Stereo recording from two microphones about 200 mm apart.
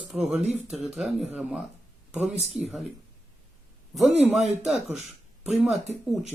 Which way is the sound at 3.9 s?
Centre (ahead or behind).